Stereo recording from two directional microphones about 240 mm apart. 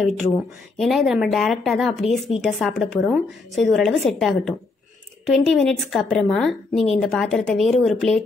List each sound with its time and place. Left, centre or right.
0.7 s a woman's voice: centre